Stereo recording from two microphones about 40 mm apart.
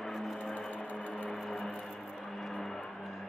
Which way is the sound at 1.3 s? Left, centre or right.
Centre.